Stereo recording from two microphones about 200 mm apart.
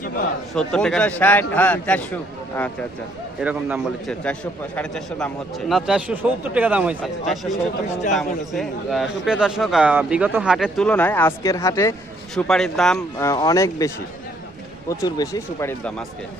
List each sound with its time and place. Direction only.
0.5 s a man's voice: 5° left (ahead or behind)
3.4 s a man's voice: 5° right (ahead or behind)
4.1 s a man's voice: 5° left (ahead or behind)
8.1 s a man's voice: centre (ahead or behind); by 11.9 s 15° left (ahead or behind)
12.3 s a man's voice: centre (ahead or behind)
13.1 s a man's voice: 15° left (ahead or behind)